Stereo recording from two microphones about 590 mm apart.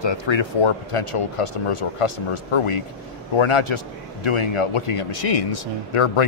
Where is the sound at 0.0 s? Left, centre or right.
Left.